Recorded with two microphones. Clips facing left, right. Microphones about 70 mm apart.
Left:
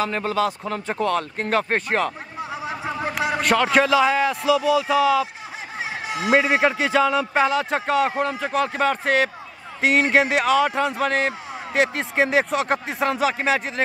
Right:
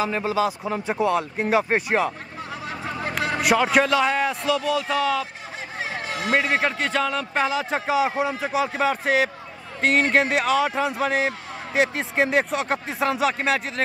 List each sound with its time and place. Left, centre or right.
0.0 s speech: centre
2.5 s a sound: centre
3.3 s speech: centre
6.0 s speech: centre